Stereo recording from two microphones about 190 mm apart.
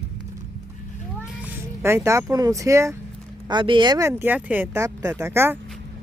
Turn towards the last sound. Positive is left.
turn(degrees=-10)  # may be behind; listen again after turning